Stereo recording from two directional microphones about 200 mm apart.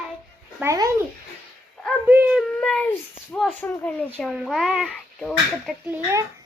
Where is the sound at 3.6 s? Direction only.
5° left (ahead or behind).